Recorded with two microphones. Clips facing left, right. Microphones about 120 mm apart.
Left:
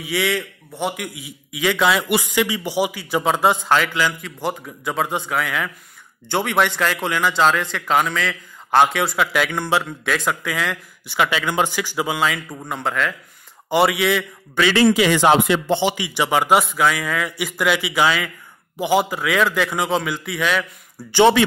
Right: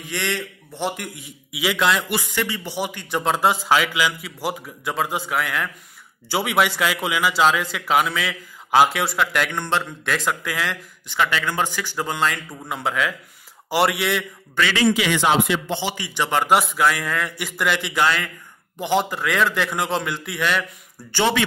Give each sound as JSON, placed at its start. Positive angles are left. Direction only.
{"t": 0.0, "sound": "a man's voice", "side_deg": 5}
{"t": 1.5, "sound": "a man's voice", "side_deg": -10}
{"t": 1.8, "sound": "a man's voice", "side_deg": 5}
{"t": 2.0, "sound": "a man's voice", "side_deg": 15}
{"t": 11.1, "sound": "a man's voice", "side_deg": 15}
{"t": 15.0, "sound": "speech", "side_deg": 40}
{"t": 15.7, "sound": "a man's voice", "side_deg": 20}